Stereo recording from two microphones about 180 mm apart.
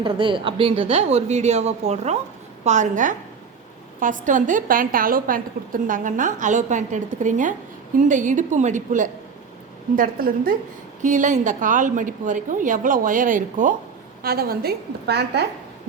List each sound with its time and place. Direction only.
0.0 s a woman's voice: 30° right (ahead or behind); by 15.4 s 65° right (ahead or behind)